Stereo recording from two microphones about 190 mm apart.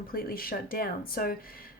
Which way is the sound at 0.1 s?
50° left (ahead or behind).